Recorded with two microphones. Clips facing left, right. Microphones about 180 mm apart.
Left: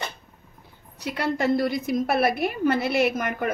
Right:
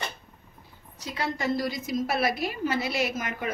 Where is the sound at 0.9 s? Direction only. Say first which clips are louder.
Left 5 dB; 65° left (ahead or behind).